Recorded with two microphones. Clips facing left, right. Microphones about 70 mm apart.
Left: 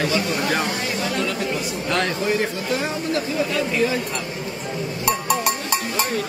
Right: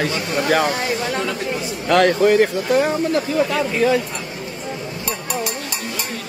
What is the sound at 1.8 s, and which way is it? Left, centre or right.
Speech, right.